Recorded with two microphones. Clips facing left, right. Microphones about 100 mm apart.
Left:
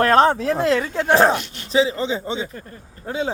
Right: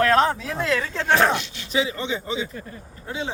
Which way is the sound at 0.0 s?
35° left (ahead or behind).